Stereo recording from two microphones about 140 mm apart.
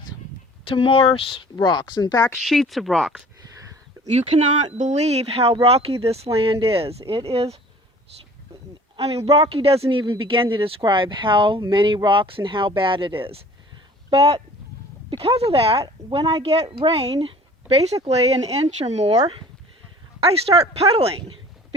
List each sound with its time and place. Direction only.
0.6 s speech: 40° left (ahead or behind)
2.4 s speech: centre (ahead or behind)
4.0 s speech: 50° right (ahead or behind)
9.0 s speech: 45° right (ahead or behind)
15.8 s speech: 30° right (ahead or behind)
17.2 s a sound: 40° right (ahead or behind)
18.0 s speech: 50° right (ahead or behind)
20.2 s speech: 45° right (ahead or behind)